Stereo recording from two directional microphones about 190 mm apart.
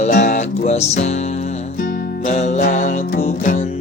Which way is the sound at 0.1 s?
45° left (ahead or behind).